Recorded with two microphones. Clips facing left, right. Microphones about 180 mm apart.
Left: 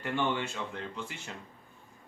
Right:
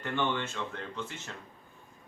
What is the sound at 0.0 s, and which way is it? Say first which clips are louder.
Speech: even; 10° left (ahead or behind).